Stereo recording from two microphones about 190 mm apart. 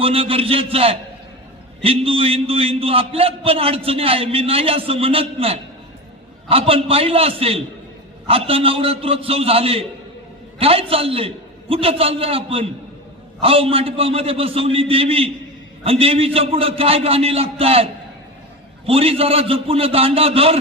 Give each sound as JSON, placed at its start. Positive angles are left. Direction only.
{"t": 0.0, "sound": "a man's voice", "side_deg": -30}
{"t": 18.9, "sound": "a man's voice", "side_deg": -30}